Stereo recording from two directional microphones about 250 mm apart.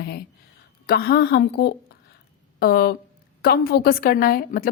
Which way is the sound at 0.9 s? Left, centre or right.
Left.